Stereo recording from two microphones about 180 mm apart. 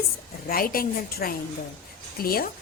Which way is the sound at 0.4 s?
55° left (ahead or behind).